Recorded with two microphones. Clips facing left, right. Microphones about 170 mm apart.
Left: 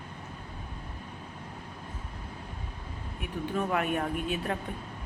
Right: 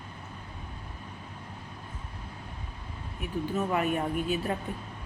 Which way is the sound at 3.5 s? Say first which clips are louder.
Right 1 dB; centre (ahead or behind).